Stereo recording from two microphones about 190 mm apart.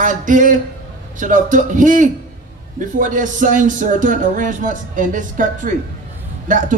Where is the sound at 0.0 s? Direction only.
45° right (ahead or behind).